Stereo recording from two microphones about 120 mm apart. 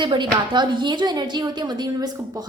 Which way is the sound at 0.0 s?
40° right (ahead or behind).